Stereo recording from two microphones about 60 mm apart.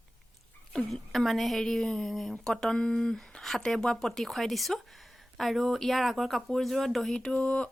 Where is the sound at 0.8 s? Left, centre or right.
Centre.